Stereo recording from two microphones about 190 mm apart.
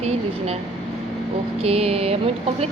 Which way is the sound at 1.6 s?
30° right (ahead or behind).